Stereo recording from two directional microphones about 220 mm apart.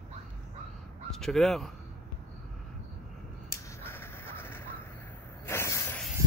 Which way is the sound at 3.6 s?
10° left (ahead or behind).